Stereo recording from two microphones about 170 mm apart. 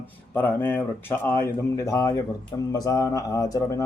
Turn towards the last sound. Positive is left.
turn(degrees=20)  # may be behind; listen again after turning